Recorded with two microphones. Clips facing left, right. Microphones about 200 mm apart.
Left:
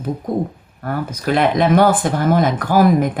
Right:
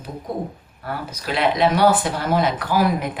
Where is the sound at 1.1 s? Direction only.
50° left (ahead or behind).